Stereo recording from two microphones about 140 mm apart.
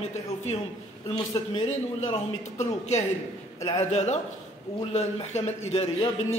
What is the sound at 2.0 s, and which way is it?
Speech, 45° left (ahead or behind).